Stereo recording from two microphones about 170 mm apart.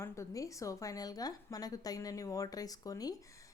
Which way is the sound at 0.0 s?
20° left (ahead or behind).